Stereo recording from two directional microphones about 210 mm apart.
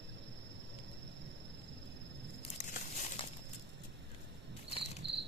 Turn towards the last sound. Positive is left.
turn(degrees=-55)  # may be behind; listen again after turning